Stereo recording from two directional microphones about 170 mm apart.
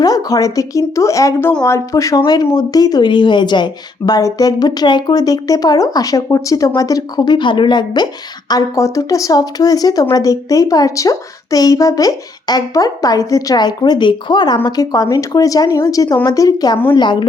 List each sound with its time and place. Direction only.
0.0 s speech: 20° left (ahead or behind)